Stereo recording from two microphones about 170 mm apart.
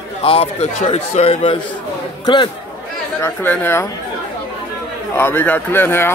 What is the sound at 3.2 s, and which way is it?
Speech, 10° left (ahead or behind).